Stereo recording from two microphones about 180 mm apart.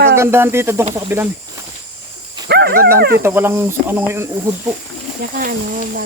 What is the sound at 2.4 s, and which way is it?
Dog, 65° right (ahead or behind).